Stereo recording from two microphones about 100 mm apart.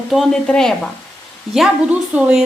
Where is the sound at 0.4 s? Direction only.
5° left (ahead or behind).